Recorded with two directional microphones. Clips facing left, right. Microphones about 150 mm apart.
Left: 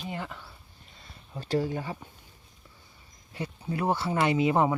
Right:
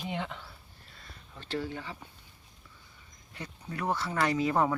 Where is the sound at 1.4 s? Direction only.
40° left (ahead or behind).